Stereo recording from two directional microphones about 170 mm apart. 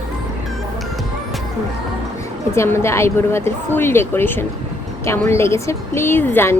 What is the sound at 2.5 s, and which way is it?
Speech, 15° left (ahead or behind).